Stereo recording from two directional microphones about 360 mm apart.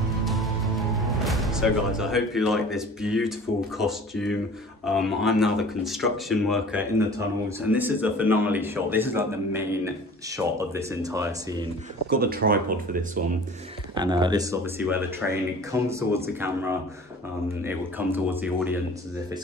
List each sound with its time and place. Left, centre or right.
0.2 s speech: centre
12.2 s speech: right
13.9 s speech: centre